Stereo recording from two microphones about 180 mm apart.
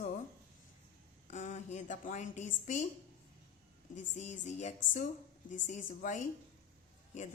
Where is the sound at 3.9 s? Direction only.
40° left (ahead or behind).